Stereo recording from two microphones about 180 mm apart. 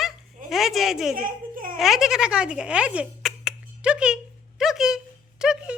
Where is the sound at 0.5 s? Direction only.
Centre (ahead or behind).